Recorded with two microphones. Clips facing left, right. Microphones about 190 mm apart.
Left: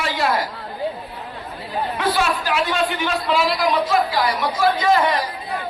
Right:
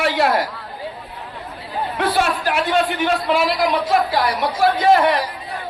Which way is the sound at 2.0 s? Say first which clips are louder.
Right 2 dB; 55° right (ahead or behind).